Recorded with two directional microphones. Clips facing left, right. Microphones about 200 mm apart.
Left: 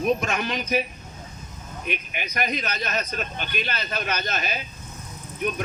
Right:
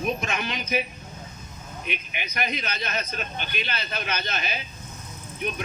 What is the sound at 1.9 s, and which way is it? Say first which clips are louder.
A man's voice: left 4 dB; 45° left (ahead or behind).